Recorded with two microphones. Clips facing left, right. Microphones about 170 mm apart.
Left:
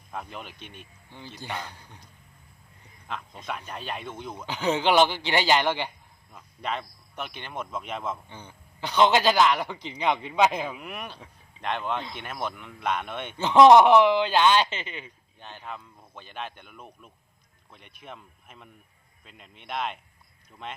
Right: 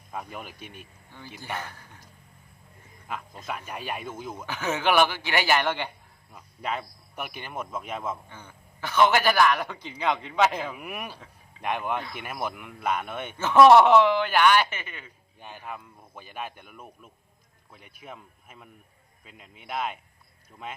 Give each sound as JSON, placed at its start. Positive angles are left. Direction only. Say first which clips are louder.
{"t": 0.1, "sound": "speech", "louder": "right 1 dB", "side_deg": -5}
{"t": 1.5, "sound": "a man's voice", "louder": "even", "side_deg": 15}
{"t": 3.1, "sound": "speech", "louder": "even", "side_deg": -5}
{"t": 4.4, "sound": "a man's voice", "louder": "left 2 dB", "side_deg": 15}
{"t": 6.3, "sound": "speech", "louder": "even", "side_deg": -5}
{"t": 8.3, "sound": "a man's voice", "louder": "left 2 dB", "side_deg": 15}
{"t": 10.8, "sound": "speech", "louder": "right 1 dB", "side_deg": -10}
{"t": 13.4, "sound": "speech", "louder": "left 1 dB", "side_deg": 20}
{"t": 15.4, "sound": "speech", "louder": "right 1 dB", "side_deg": -10}